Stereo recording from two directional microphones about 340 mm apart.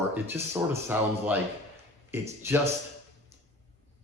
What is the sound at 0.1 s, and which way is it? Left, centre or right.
Speech, centre.